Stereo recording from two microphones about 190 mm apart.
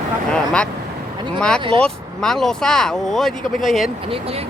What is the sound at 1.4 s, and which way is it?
Speech, 5° left (ahead or behind).